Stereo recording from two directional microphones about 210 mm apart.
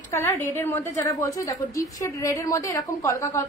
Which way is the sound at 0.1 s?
10° left (ahead or behind).